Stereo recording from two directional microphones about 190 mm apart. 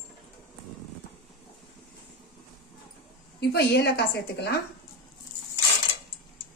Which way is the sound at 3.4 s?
60° left (ahead or behind).